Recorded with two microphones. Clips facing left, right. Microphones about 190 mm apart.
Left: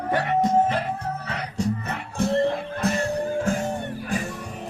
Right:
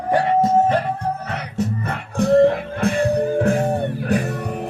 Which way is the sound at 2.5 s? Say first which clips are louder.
Right 4 dB; 60° right (ahead or behind).